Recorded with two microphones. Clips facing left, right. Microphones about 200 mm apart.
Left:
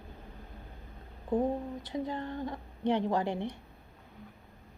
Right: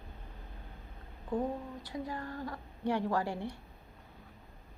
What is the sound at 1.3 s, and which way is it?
Speech, 20° left (ahead or behind).